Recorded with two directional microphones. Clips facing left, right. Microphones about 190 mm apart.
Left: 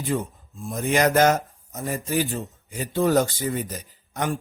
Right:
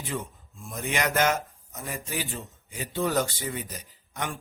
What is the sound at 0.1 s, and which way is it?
Speech, 45° left (ahead or behind).